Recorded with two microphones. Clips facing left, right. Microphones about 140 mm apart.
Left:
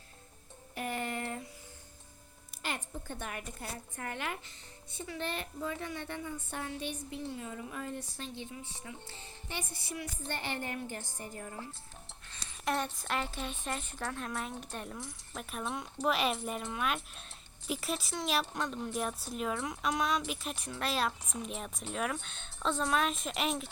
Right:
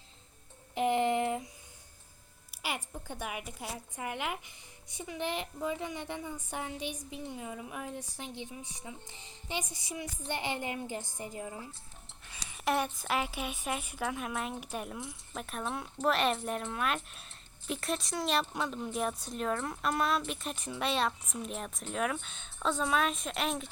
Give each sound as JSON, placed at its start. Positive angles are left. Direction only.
{"t": 0.8, "sound": "a sound", "side_deg": -20}
{"t": 2.5, "sound": "a woman's voice", "side_deg": -10}
{"t": 20.7, "sound": "a woman's voice", "side_deg": -10}